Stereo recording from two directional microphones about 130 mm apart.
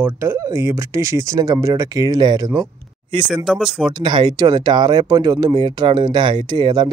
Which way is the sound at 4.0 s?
35° right (ahead or behind).